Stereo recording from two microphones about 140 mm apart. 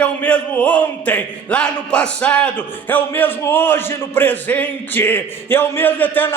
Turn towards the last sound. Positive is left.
turn(degrees=15)  # may be behind; listen again after turning